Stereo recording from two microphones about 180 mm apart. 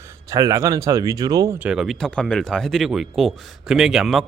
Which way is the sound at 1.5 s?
5° right (ahead or behind).